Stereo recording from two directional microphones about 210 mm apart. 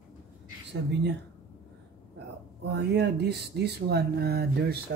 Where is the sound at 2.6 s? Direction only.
55° right (ahead or behind).